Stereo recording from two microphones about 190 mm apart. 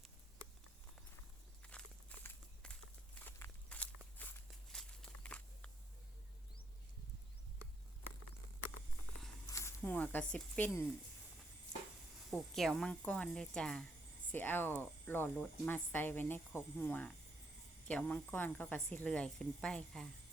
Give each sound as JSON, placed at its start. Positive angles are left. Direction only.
{"t": 1.6, "sound": "walk", "side_deg": 5}
{"t": 9.5, "sound": "speech", "side_deg": 15}
{"t": 12.3, "sound": "speech", "side_deg": 0}